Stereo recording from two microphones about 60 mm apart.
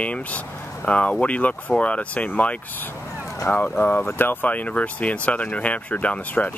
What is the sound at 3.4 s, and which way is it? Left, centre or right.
Speech, left.